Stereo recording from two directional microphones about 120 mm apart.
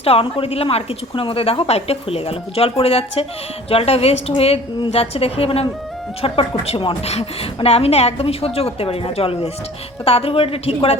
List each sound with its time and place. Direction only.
0.0 s a woman's voice: 55° left (ahead or behind)